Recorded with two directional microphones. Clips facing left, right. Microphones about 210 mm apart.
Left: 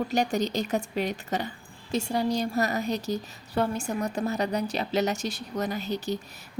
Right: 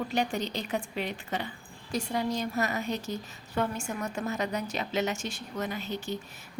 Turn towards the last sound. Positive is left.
turn(degrees=35)  # may be behind; listen again after turning